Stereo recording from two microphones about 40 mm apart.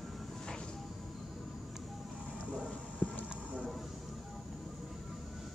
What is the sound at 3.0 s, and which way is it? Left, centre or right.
Clip-clop, left.